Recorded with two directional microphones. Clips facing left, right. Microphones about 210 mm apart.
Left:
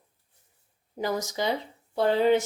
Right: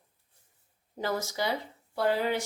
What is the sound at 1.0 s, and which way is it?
Speech, 15° left (ahead or behind).